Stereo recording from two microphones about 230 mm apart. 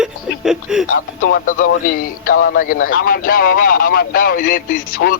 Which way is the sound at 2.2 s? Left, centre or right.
Left.